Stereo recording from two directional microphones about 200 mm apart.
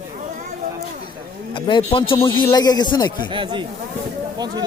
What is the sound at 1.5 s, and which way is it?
Speech, 25° left (ahead or behind).